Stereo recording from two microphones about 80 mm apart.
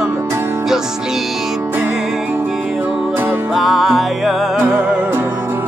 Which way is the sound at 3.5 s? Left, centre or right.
Centre.